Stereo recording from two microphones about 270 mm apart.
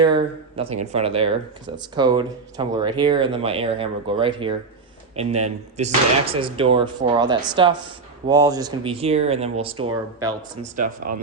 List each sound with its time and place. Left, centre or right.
0.0 s speech: centre
10.6 s speech: right